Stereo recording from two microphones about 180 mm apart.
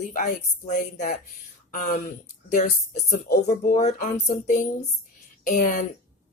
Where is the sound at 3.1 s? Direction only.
55° left (ahead or behind).